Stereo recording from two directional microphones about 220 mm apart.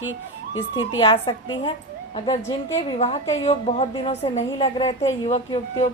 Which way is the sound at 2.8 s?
25° left (ahead or behind).